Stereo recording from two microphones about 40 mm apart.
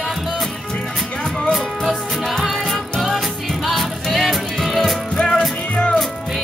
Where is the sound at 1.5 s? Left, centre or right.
Centre.